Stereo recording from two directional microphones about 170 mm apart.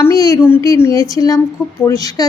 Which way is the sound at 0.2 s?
15° left (ahead or behind).